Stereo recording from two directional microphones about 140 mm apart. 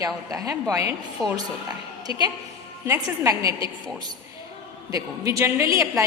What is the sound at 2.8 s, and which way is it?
Speech, 20° right (ahead or behind).